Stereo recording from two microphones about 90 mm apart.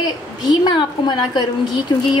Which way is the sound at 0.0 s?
55° left (ahead or behind).